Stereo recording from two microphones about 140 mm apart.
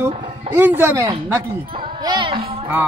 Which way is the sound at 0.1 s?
45° right (ahead or behind).